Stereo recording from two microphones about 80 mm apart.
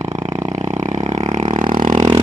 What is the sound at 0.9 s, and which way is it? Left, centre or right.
Vehicle, right.